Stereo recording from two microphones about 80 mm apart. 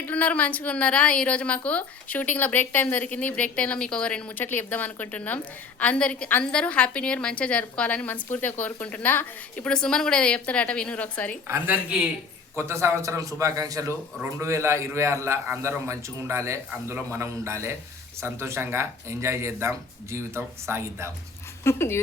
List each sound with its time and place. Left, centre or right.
0.0 s a woman's voice: centre
9.6 s a woman's voice: centre
11.4 s speech: right
11.7 s a man's voice: centre
12.5 s speech: right
21.6 s speech: left